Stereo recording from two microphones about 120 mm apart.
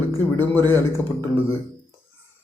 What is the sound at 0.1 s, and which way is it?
A man's voice, 20° left (ahead or behind).